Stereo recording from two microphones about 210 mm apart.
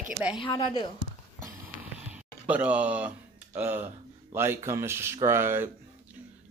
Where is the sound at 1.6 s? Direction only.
5° right (ahead or behind).